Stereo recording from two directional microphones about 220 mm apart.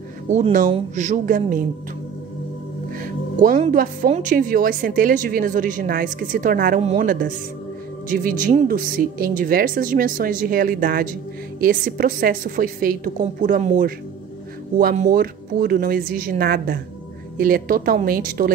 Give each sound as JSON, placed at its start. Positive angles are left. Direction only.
{"t": 0.3, "sound": "speech", "side_deg": -35}
{"t": 3.0, "sound": "speech", "side_deg": -40}